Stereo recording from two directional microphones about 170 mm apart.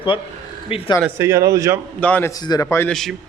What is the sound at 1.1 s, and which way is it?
Speech, 15° right (ahead or behind).